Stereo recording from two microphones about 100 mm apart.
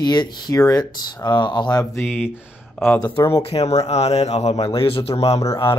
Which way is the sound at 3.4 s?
90° left.